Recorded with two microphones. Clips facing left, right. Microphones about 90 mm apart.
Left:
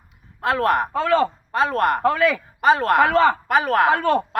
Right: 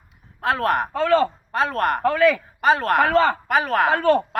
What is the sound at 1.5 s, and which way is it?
Speech, 5° left (ahead or behind).